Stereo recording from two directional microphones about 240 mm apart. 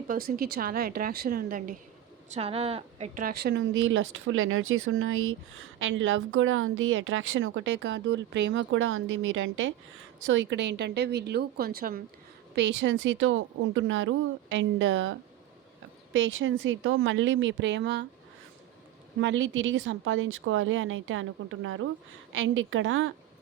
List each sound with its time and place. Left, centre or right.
0.1 s speech: right
2.3 s speech: right
12.5 s speech: right
16.1 s speech: right
19.2 s speech: right